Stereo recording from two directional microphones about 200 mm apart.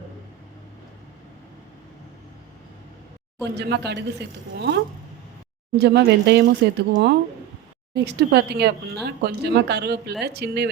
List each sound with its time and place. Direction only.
3.5 s speech: 55° right (ahead or behind)
5.8 s speech: 55° right (ahead or behind)